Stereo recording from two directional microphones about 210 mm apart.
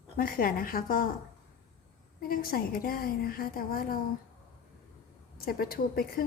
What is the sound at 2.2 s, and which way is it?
A woman's voice, 45° left (ahead or behind).